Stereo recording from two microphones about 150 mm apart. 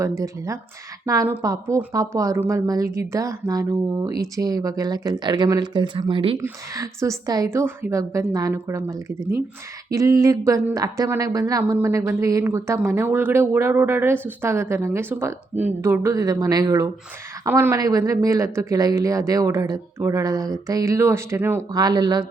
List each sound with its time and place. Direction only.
0.2 s speech: 20° right (ahead or behind)
6.4 s speech: 20° right (ahead or behind)